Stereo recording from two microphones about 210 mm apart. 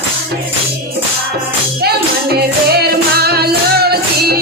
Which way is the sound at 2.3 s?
50° right (ahead or behind).